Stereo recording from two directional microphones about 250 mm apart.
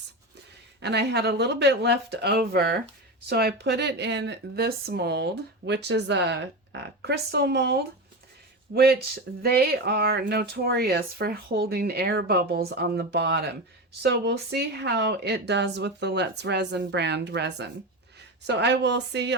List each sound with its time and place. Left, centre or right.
0.8 s speech: right